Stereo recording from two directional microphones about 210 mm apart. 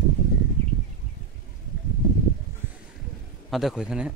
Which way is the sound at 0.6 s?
5° left (ahead or behind).